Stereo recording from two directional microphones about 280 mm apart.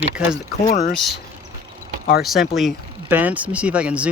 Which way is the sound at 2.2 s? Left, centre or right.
Centre.